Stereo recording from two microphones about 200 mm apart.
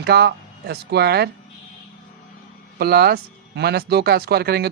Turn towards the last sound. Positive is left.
turn(degrees=-50)  # may be behind; listen again after turning